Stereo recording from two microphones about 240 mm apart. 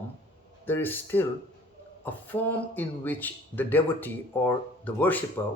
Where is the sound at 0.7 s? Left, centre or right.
Centre.